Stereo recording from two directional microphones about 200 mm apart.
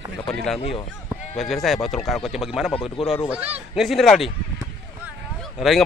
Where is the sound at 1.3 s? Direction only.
Centre (ahead or behind).